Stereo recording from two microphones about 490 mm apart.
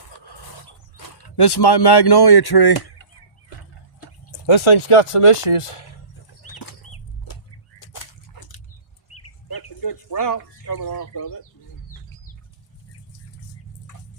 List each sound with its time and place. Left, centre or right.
0.3 s a sound: left
0.9 s speech: left
4.3 s speech: left
6.5 s bird flight: left
7.8 s dog: left
9.5 s bird: left